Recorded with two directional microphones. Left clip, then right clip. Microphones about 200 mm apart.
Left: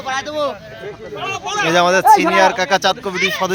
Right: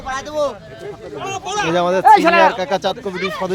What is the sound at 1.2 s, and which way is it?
Speech, 60° right (ahead or behind).